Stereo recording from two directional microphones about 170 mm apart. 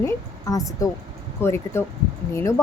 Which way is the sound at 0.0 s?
20° left (ahead or behind).